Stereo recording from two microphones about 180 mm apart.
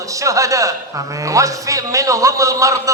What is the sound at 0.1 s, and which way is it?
A man's voice, 15° right (ahead or behind).